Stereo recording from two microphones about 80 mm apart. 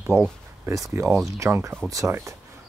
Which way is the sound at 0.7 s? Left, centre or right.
Right.